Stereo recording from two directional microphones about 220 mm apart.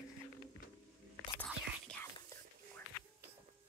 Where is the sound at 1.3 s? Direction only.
5° left (ahead or behind).